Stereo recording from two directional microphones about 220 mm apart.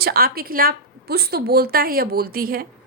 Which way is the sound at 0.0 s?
40° right (ahead or behind).